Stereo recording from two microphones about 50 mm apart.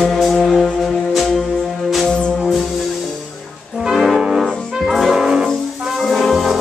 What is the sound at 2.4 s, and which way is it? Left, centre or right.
Music, centre.